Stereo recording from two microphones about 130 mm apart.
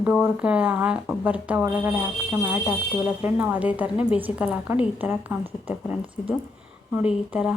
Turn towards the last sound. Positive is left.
turn(degrees=-10)  # may be behind; listen again after turning